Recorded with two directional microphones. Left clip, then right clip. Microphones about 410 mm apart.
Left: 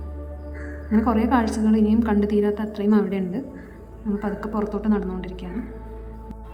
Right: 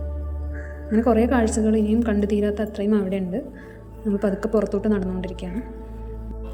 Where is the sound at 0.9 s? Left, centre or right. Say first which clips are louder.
Right 2 dB; centre.